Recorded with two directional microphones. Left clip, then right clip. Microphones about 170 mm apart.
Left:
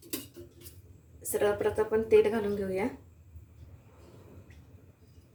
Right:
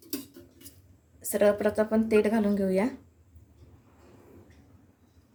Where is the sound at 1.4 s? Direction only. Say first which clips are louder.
Right 4 dB; 75° right (ahead or behind).